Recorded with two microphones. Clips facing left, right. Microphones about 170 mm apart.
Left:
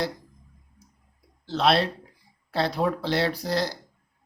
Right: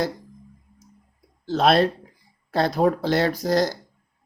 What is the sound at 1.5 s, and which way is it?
Speech, 45° right (ahead or behind).